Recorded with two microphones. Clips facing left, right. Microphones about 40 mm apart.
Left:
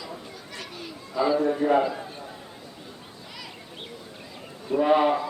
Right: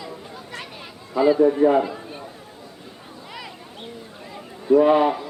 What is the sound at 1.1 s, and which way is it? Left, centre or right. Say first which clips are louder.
Speech: right 6 dB; centre.